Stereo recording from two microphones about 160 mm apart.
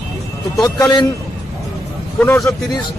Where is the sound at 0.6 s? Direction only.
25° left (ahead or behind).